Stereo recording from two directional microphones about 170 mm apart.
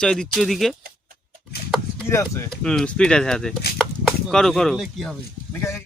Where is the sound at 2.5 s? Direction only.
5° left (ahead or behind).